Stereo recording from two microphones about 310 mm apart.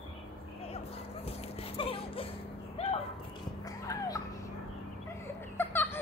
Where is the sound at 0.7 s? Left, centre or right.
Centre.